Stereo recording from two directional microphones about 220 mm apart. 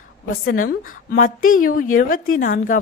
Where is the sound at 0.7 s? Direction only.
40° left (ahead or behind).